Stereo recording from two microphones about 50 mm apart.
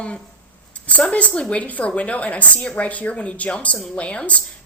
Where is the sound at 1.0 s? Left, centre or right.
Left.